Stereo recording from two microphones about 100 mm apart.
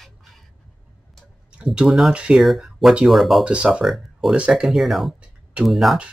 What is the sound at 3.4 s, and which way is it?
Speech, 10° right (ahead or behind).